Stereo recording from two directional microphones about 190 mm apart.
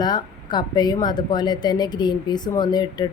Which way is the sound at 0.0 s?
20° left (ahead or behind).